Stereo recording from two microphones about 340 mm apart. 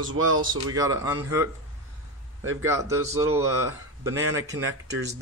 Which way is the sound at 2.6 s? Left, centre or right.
Centre.